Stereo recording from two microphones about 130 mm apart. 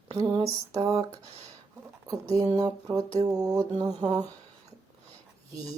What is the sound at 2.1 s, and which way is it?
Speech, 25° right (ahead or behind).